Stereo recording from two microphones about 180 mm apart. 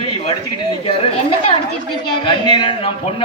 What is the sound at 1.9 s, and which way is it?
A woman's voice, 25° left (ahead or behind).